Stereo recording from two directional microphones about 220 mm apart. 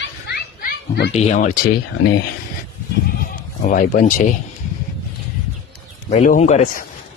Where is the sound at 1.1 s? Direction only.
30° left (ahead or behind).